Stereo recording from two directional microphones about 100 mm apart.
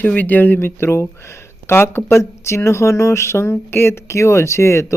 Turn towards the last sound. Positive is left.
turn(degrees=30)  # may be behind; listen again after turning